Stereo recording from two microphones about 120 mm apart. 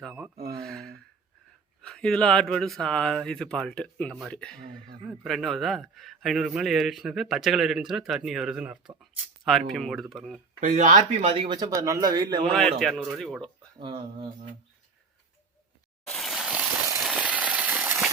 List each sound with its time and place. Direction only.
0.0 s speech: 5° right (ahead or behind)
0.6 s a sound: 5° left (ahead or behind)
1.8 s a man's voice: 5° left (ahead or behind)
9.5 s a man's voice: centre (ahead or behind)
10.6 s speech: 90° right
11.3 s speech: 40° right (ahead or behind)
12.5 s a man's voice: 5° left (ahead or behind)
13.7 s speech: 40° right (ahead or behind)
16.0 s a sound: centre (ahead or behind)